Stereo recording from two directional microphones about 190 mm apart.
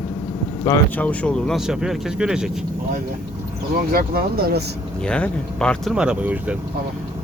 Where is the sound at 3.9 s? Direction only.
50° right (ahead or behind).